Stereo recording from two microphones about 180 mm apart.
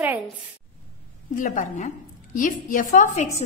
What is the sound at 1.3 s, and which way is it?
A woman's voice, 45° left (ahead or behind).